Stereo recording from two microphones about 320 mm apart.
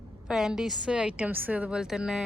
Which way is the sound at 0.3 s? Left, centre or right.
Centre.